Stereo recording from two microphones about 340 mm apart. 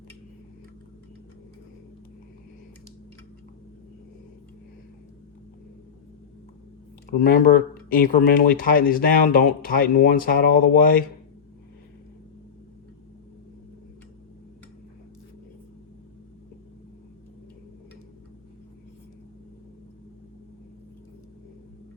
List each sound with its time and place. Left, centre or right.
7.1 s speech: left